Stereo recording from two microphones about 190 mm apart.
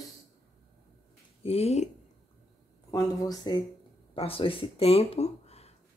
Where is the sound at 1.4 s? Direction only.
30° left (ahead or behind).